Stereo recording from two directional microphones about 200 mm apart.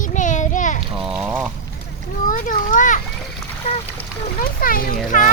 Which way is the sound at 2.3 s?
40° left (ahead or behind).